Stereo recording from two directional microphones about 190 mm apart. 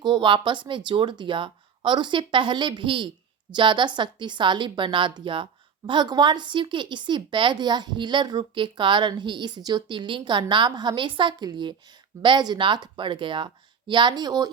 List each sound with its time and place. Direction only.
0.0 s a woman's voice: 25° right (ahead or behind)